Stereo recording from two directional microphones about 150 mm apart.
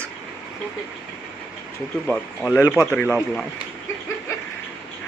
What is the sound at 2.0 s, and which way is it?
Speech, 5° left (ahead or behind).